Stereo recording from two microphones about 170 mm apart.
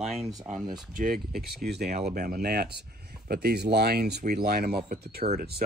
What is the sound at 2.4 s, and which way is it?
Speech, 70° right (ahead or behind).